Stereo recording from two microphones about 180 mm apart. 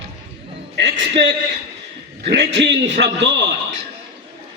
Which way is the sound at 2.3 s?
85° right.